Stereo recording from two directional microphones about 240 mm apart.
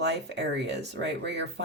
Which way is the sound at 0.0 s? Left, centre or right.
Right.